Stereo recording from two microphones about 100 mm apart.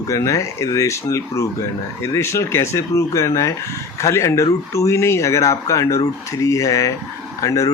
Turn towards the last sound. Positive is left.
turn(degrees=35)  # may be behind; listen again after turning